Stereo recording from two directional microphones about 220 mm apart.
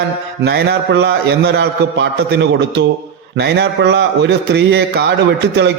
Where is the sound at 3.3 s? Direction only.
50° right (ahead or behind).